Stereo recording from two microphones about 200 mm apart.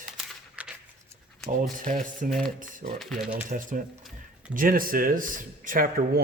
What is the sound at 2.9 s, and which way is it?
Speech, centre (ahead or behind).